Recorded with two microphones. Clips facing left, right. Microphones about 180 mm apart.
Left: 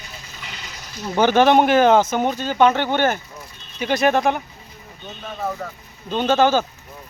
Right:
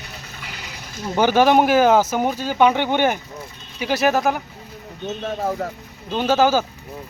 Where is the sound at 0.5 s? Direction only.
60° right (ahead or behind).